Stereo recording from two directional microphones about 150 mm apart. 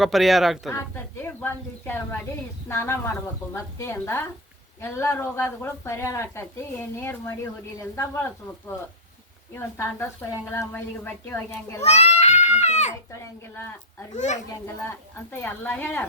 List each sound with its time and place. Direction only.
0.0 s speech: centre (ahead or behind)
0.7 s a woman's voice: 15° left (ahead or behind)
9.6 s a woman's voice: 15° left (ahead or behind)
11.8 s a child's voice: 45° left (ahead or behind)
14.1 s a child's voice: 50° left (ahead or behind)
14.5 s a woman's voice: 20° left (ahead or behind)